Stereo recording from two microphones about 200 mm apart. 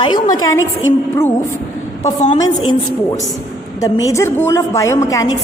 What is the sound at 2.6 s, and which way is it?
A woman's voice, 20° left (ahead or behind).